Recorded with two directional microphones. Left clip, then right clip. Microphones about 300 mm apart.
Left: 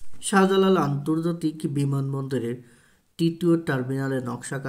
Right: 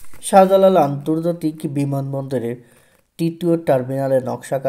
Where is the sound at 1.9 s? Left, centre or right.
Right.